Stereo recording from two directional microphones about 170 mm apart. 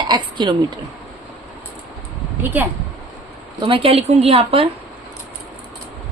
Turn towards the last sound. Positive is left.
turn(degrees=-35)  # may be behind; listen again after turning